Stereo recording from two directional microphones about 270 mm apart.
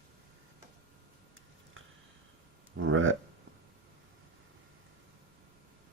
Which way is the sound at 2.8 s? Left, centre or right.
Right.